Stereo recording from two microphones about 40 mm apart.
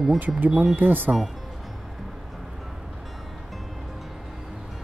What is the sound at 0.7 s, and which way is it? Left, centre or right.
Speech, right.